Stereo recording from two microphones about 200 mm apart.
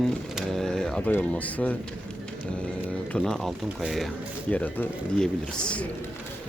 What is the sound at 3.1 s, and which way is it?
Speech, centre (ahead or behind).